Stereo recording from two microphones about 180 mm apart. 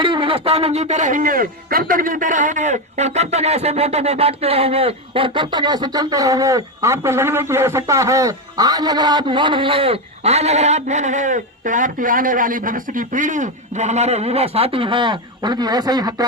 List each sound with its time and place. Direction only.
0.0 s speech: 25° right (ahead or behind)